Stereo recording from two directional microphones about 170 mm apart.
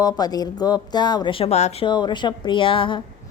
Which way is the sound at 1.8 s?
25° left (ahead or behind).